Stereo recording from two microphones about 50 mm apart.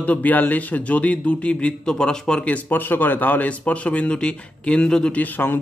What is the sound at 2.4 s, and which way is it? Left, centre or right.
Speech, left.